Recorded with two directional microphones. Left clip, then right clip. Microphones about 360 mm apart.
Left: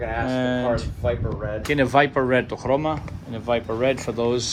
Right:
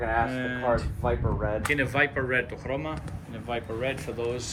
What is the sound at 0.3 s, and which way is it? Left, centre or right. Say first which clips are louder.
Speech: left 4 dB; centre.